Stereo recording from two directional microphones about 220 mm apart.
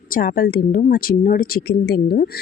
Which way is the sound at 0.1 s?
40° left (ahead or behind).